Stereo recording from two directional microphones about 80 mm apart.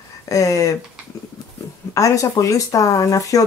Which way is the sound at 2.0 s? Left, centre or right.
Left.